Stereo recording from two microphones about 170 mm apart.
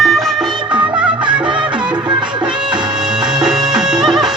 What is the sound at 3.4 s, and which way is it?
Music, 5° right (ahead or behind).